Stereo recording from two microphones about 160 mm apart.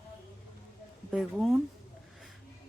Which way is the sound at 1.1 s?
Centre (ahead or behind).